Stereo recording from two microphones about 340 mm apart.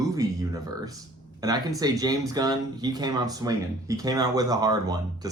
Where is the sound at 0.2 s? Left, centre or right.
Centre.